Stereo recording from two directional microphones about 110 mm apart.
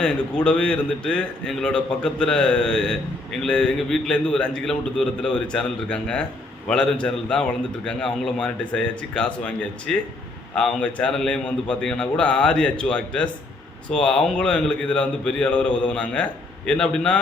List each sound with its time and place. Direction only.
0.0 s a man's voice: 10° left (ahead or behind)